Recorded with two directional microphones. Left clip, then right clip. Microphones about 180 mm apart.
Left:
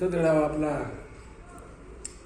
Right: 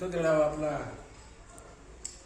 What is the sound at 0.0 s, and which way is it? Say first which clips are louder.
Speech: left 3 dB; 15° right (ahead or behind).